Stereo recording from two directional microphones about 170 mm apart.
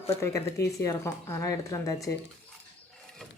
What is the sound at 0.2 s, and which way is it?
Speech, 15° left (ahead or behind).